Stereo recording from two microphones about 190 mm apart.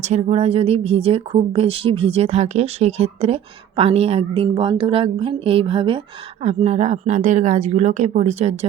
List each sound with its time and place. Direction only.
0.0 s speech: 35° right (ahead or behind)